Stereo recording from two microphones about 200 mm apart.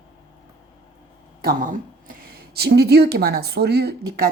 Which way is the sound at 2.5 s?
50° right (ahead or behind).